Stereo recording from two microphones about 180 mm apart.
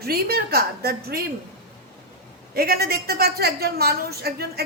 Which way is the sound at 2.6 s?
60° right (ahead or behind).